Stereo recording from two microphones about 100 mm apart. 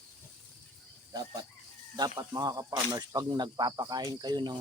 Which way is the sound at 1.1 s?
40° right (ahead or behind).